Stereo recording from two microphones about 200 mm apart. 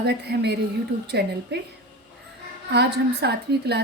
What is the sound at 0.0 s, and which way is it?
A woman's voice, 55° right (ahead or behind).